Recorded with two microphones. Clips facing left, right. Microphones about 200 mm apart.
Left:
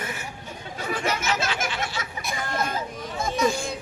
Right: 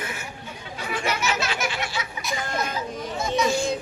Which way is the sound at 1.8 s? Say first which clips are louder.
Even; 50° left (ahead or behind).